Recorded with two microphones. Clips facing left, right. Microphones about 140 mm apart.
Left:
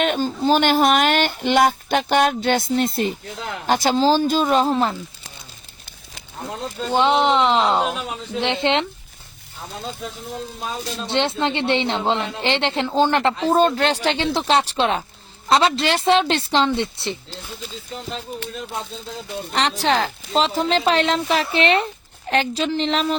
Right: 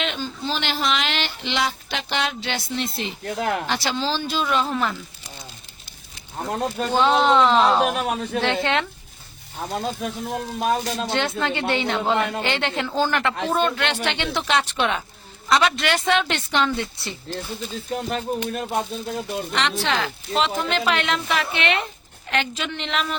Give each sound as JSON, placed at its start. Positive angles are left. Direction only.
{"t": 0.0, "sound": "speech", "side_deg": 45}
{"t": 3.2, "sound": "speech", "side_deg": -60}
{"t": 3.7, "sound": "speech", "side_deg": 45}
{"t": 6.5, "sound": "speech", "side_deg": -60}
{"t": 7.3, "sound": "a woman's voice", "side_deg": 20}
{"t": 7.9, "sound": "speech", "side_deg": -70}
{"t": 8.4, "sound": "a woman's voice", "side_deg": 25}
{"t": 9.6, "sound": "speech", "side_deg": -70}
{"t": 11.1, "sound": "a woman's voice", "side_deg": 25}
{"t": 18.5, "sound": "speech", "side_deg": -55}
{"t": 19.5, "sound": "speech", "side_deg": 35}